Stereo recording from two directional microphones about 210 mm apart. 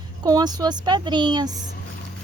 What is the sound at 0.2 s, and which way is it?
Speech, 20° right (ahead or behind).